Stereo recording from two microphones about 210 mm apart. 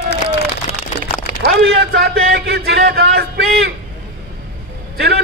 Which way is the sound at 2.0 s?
50° right (ahead or behind).